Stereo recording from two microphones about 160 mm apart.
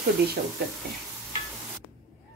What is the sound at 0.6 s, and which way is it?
Speech, 90° right.